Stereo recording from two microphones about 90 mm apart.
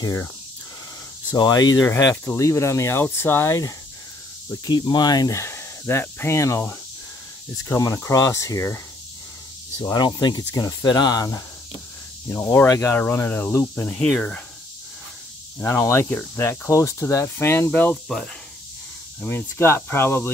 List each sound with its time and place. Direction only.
1.3 s speech: 45° left (ahead or behind)
2.2 s speech: 35° left (ahead or behind)
4.6 s speech: 55° left (ahead or behind); by 8.8 s 30° left (ahead or behind)
9.9 s speech: 55° left (ahead or behind)
10.5 s speech: 40° left (ahead or behind)
12.5 s speech: 35° left (ahead or behind)
14.0 s speech: centre (ahead or behind)
15.6 s speech: 30° left (ahead or behind)
18.0 s speech: 5° left (ahead or behind)
19.2 s speech: 25° left (ahead or behind)